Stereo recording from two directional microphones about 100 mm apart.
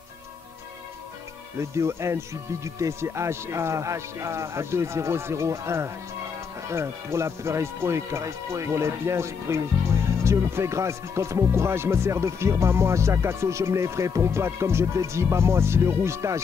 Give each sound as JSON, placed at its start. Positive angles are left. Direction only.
{"t": 1.6, "sound": "speech", "side_deg": -25}